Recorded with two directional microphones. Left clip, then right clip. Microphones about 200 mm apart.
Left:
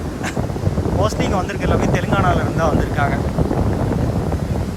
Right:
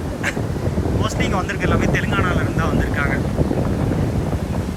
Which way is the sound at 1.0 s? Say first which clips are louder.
Left 4 dB; 20° left (ahead or behind).